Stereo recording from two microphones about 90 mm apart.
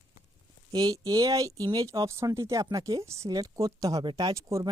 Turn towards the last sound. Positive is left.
turn(degrees=-40)  # may be behind; listen again after turning